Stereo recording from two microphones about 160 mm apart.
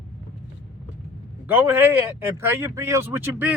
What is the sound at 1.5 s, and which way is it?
Speech, 15° right (ahead or behind).